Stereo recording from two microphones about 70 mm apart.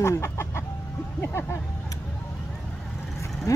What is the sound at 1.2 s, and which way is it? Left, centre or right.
Music, left.